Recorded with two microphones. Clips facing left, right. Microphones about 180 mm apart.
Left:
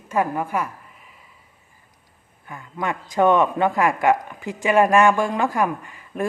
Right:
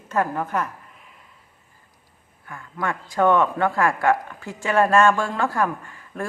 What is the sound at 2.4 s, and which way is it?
A man's voice, 20° left (ahead or behind).